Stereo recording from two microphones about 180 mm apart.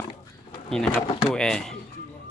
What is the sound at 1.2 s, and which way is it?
Speech, 5° left (ahead or behind).